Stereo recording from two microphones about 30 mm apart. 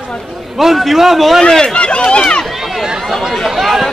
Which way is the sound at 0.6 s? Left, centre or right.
Centre.